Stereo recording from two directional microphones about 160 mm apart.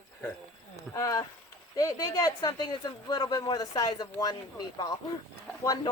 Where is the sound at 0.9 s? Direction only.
20° left (ahead or behind).